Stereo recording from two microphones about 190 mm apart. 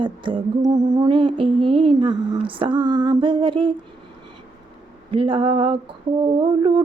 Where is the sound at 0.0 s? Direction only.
25° right (ahead or behind).